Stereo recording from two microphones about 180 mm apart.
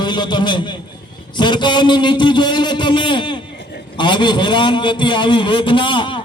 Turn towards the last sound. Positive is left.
turn(degrees=25)  # may be behind; listen again after turning